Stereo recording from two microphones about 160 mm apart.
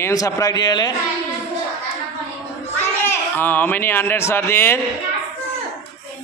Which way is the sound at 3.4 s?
10° left (ahead or behind).